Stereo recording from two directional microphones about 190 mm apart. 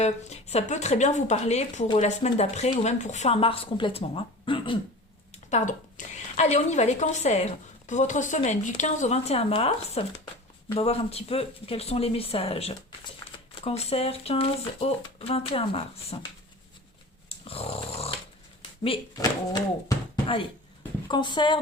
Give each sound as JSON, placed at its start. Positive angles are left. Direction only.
{"t": 0.0, "sound": "speech", "side_deg": 35}
{"t": 5.3, "sound": "speech", "side_deg": 35}
{"t": 17.2, "sound": "dog", "side_deg": 30}
{"t": 18.8, "sound": "speech", "side_deg": 25}